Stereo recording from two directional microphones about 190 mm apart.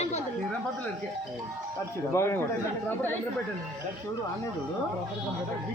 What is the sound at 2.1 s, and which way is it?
Speech, 15° left (ahead or behind).